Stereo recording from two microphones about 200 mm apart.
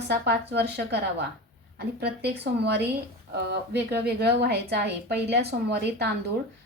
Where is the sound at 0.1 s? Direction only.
55° right (ahead or behind).